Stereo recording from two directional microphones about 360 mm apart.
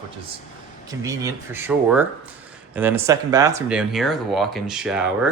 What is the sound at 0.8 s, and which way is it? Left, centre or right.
Speech, centre.